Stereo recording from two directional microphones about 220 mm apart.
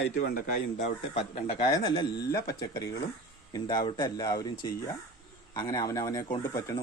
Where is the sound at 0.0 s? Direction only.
45° left (ahead or behind).